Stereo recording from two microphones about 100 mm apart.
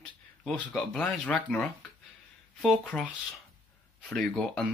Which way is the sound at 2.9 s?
20° left (ahead or behind).